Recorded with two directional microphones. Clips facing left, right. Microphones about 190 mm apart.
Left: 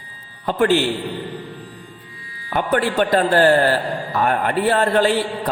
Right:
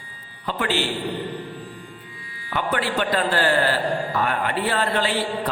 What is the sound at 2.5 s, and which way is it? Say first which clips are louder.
A man's voice: left 5 dB; 45° left (ahead or behind).